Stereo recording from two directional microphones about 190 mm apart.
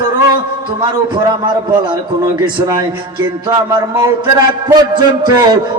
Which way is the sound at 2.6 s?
15° right (ahead or behind).